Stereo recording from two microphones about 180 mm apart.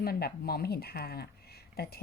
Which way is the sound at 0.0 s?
60° left (ahead or behind).